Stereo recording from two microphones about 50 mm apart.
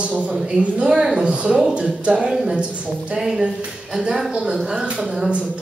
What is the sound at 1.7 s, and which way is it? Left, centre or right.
A man's voice, right.